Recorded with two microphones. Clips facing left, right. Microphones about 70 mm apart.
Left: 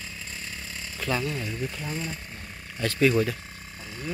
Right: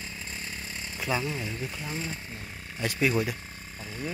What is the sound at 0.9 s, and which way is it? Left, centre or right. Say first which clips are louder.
Speech: left 1 dB; centre.